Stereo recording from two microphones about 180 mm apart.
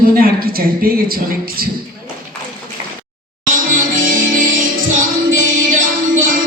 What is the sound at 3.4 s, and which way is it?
Music, 50° right (ahead or behind).